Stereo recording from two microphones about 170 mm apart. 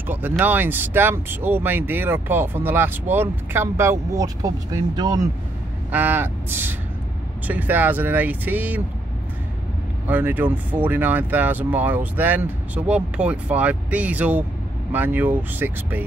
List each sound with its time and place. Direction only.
0.0 s speech: 10° right (ahead or behind)
5.9 s speech: 10° right (ahead or behind)
10.0 s speech: 10° right (ahead or behind)